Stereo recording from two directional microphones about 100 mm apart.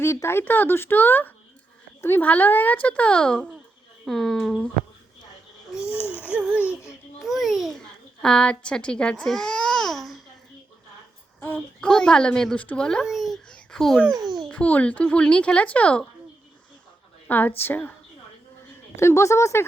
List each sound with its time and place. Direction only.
0.0 s speech: 25° left (ahead or behind); by 4.7 s 5° left (ahead or behind)
5.8 s a sound: 25° left (ahead or behind)
6.2 s a sound: 10° right (ahead or behind)
7.2 s babbling: centre (ahead or behind)
7.8 s baby cry: 10° left (ahead or behind)
11.3 s speech: 20° left (ahead or behind)
13.1 s babbling: centre (ahead or behind)
14.5 s speech: 15° left (ahead or behind)
17.2 s a woman's voice: 20° left (ahead or behind)
18.9 s speech: 30° left (ahead or behind)